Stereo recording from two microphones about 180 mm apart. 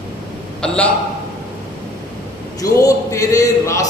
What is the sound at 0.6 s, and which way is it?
Speech, 5° left (ahead or behind).